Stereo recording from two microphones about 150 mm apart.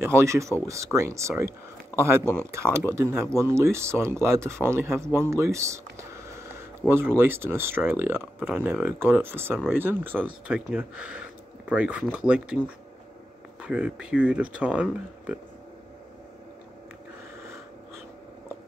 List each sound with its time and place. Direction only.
0.0 s speech: 20° right (ahead or behind)